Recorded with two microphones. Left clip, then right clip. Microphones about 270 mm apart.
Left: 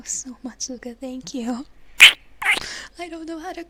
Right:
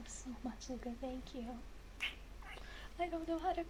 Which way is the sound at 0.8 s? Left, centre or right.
Left.